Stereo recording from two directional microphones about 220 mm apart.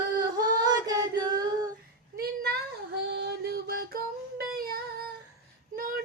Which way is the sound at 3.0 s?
50° right (ahead or behind).